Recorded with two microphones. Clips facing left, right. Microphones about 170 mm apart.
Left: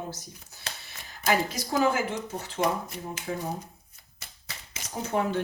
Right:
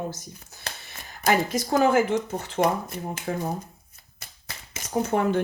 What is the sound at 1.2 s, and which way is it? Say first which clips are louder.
Speech: right 4 dB; 50° right (ahead or behind).